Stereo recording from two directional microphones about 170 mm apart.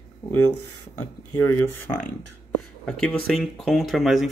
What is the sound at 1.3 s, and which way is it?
Speech, 20° left (ahead or behind).